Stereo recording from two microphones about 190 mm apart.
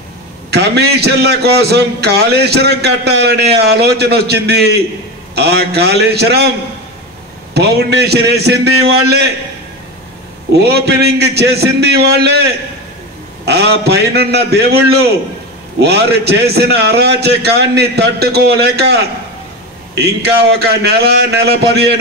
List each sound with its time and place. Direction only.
0.5 s a man's voice: 60° right (ahead or behind)
7.5 s a man's voice: 60° right (ahead or behind)
10.5 s a man's voice: 60° right (ahead or behind)
13.5 s a man's voice: 60° right (ahead or behind)